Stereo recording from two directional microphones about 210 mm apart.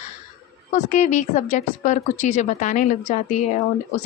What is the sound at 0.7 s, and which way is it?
A woman's voice, 35° left (ahead or behind).